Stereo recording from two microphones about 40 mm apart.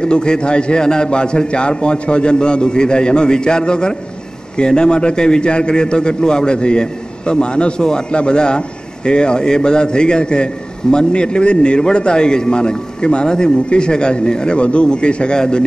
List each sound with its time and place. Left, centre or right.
0.0 s a man's voice: left